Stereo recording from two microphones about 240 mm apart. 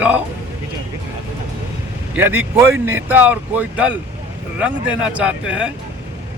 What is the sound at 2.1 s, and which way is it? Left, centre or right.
A man's voice, centre.